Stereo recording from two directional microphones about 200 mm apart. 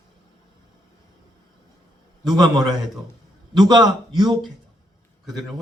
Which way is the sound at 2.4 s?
20° right (ahead or behind).